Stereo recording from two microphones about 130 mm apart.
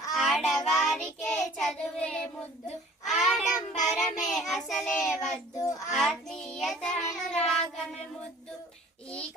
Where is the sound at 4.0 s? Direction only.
75° left (ahead or behind).